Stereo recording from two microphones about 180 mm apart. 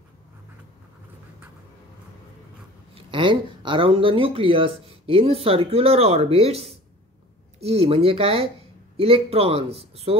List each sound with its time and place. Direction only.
2.9 s speech: 25° right (ahead or behind)